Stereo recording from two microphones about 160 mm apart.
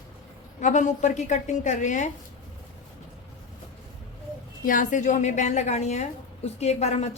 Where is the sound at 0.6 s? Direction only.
50° left (ahead or behind).